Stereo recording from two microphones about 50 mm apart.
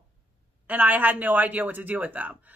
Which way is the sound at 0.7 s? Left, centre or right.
Right.